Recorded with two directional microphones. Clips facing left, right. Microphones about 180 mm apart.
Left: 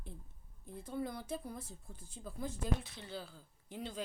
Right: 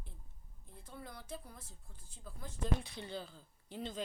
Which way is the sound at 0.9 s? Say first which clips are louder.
Left 8 dB; 15° left (ahead or behind).